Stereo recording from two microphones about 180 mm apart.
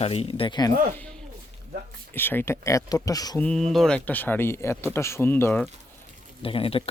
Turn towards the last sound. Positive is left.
turn(degrees=30)  # may be behind; listen again after turning